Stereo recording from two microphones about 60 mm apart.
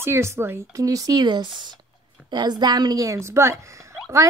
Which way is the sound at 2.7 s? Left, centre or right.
Right.